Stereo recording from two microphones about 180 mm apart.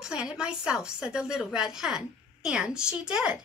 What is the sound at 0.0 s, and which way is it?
A woman's voice, 5° right (ahead or behind).